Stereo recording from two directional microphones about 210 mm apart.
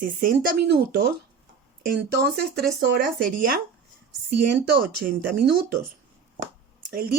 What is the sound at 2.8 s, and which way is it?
Speech, 45° right (ahead or behind).